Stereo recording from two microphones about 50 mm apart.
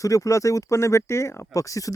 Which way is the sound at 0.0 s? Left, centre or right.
Left.